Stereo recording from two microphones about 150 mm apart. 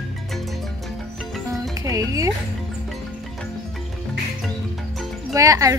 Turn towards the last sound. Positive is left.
turn(degrees=-20)  # may be behind; listen again after turning